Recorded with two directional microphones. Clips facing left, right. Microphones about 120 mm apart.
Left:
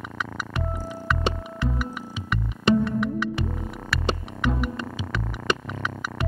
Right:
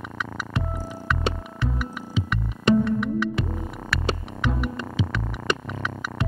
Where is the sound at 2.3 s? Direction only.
Centre (ahead or behind).